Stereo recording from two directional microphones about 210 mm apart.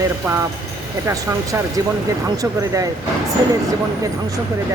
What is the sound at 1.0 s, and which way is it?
Speech, 15° right (ahead or behind).